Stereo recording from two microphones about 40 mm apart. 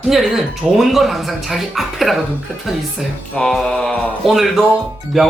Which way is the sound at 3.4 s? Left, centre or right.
Centre.